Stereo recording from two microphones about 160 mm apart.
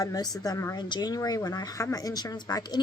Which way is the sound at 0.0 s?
20° left (ahead or behind).